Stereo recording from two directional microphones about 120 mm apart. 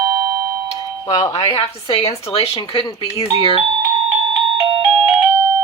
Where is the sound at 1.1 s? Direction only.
30° left (ahead or behind).